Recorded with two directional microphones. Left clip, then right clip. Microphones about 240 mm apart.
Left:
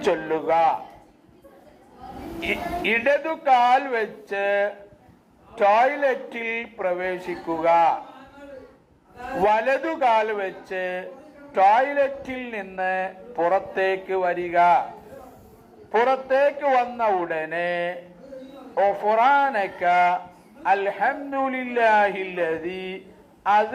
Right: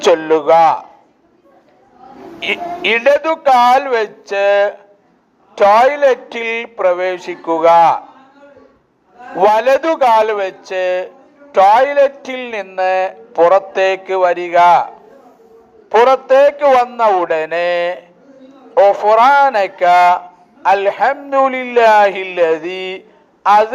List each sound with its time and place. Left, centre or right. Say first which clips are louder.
0.0 s a man's voice: right 12 dB; right
2.4 s a man's voice: right 8 dB; right
9.4 s a man's voice: right 10 dB; right
15.9 s a man's voice: right 11 dB; right